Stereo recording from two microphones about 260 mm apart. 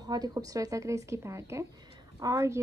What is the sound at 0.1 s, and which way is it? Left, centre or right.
Speech, centre.